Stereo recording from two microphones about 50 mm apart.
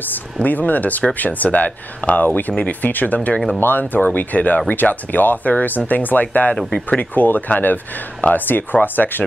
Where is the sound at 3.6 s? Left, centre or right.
Left.